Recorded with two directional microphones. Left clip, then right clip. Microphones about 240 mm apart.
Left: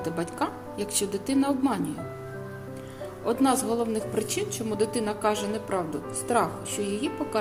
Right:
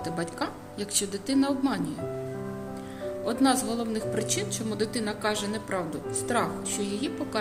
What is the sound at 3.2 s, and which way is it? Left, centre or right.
A woman's voice, centre.